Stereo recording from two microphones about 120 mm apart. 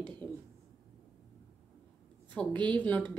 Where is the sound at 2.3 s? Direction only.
15° left (ahead or behind).